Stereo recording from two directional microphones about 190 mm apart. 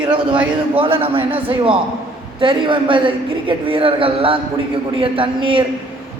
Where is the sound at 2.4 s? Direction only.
25° right (ahead or behind).